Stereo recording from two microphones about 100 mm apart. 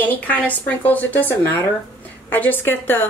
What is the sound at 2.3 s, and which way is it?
Speech, 20° left (ahead or behind).